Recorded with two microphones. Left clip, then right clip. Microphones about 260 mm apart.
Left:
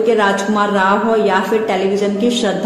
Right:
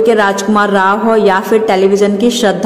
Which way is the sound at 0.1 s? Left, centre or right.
Right.